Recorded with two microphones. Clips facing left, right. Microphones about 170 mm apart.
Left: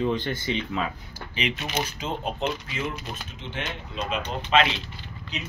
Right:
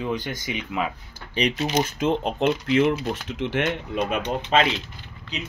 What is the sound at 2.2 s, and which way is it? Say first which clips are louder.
Speech: right 6 dB; 65° right (ahead or behind).